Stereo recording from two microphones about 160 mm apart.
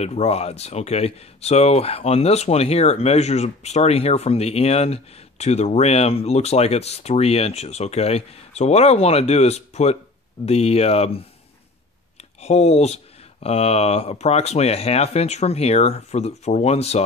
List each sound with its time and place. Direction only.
0.0 s speech: 45° left (ahead or behind)